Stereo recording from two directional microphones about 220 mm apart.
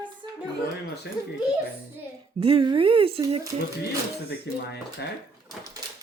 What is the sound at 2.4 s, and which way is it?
Speech, 25° right (ahead or behind).